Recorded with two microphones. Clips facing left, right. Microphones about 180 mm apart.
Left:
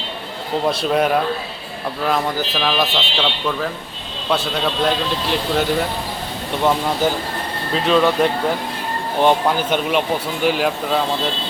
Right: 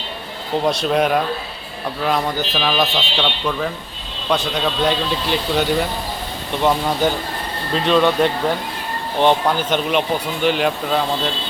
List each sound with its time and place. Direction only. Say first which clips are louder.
0.6 s speech: even; centre (ahead or behind)